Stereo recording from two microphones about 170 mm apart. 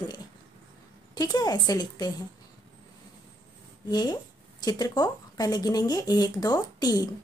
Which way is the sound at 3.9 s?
25° left (ahead or behind).